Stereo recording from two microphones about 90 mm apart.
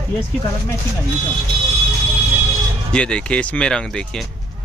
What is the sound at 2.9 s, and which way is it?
Speech, 10° left (ahead or behind).